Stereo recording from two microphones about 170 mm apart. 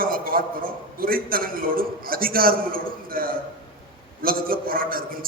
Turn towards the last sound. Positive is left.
turn(degrees=-55)  # may be behind; listen again after turning